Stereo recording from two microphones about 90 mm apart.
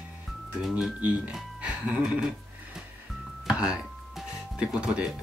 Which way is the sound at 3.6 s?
10° right (ahead or behind).